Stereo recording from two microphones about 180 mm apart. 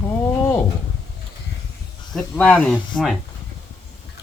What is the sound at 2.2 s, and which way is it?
Chuckle, 5° left (ahead or behind).